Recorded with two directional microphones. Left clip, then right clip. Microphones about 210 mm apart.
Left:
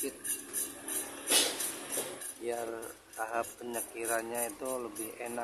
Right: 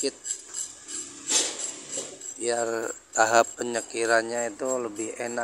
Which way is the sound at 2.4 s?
35° right (ahead or behind).